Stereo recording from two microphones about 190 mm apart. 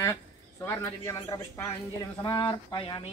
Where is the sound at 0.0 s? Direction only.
15° left (ahead or behind).